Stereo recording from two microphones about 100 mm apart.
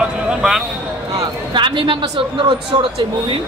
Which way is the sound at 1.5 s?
55° right (ahead or behind).